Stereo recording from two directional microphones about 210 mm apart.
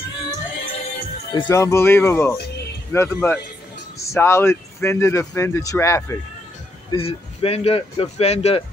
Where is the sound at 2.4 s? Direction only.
50° left (ahead or behind).